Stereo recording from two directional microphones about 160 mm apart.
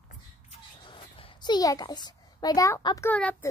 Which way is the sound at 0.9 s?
30° left (ahead or behind).